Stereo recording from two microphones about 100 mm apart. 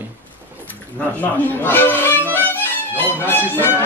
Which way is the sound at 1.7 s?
20° left (ahead or behind).